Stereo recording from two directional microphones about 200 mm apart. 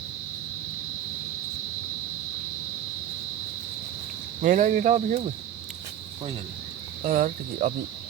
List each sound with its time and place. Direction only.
4.4 s speech: 40° right (ahead or behind)
7.0 s cricket: 45° right (ahead or behind)